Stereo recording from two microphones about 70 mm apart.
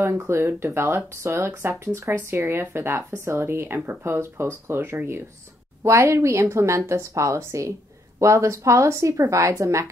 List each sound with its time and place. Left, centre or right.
0.3 s speech: right
5.8 s a woman's voice: right